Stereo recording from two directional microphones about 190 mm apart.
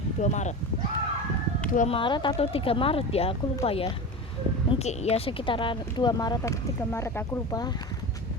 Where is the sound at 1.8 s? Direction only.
25° left (ahead or behind).